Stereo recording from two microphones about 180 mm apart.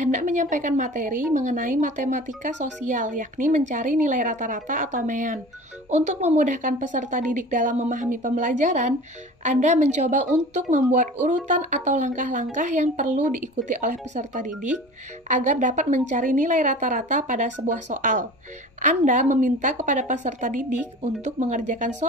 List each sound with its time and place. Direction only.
0.0 s a woman's voice: 45° right (ahead or behind)